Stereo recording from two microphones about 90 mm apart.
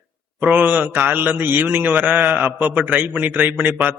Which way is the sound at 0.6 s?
15° right (ahead or behind).